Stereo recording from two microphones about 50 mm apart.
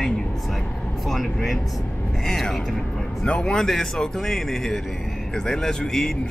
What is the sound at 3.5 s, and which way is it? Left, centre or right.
Speech, centre.